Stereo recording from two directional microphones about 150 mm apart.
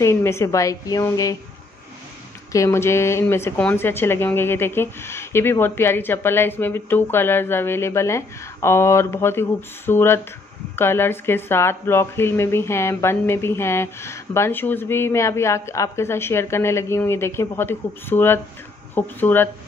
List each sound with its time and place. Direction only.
0.0 s a woman's voice: 15° left (ahead or behind)
2.5 s speech: 20° left (ahead or behind)